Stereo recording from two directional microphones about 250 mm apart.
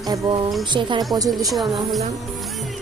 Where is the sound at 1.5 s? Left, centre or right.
Centre.